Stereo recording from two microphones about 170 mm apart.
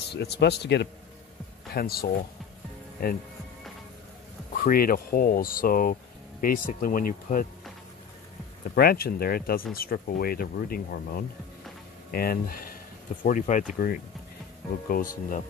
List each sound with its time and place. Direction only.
0.1 s speech: 75° left (ahead or behind)
1.7 s speech: 65° left (ahead or behind)
4.6 s speech: 60° left (ahead or behind)
8.6 s speech: 60° left (ahead or behind)